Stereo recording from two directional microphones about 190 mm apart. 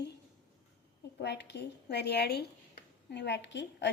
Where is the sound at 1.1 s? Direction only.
60° left (ahead or behind).